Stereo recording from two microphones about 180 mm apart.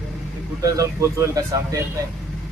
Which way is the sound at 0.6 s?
15° right (ahead or behind).